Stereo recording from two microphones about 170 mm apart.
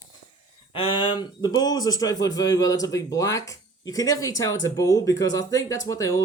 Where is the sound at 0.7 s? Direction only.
30° left (ahead or behind).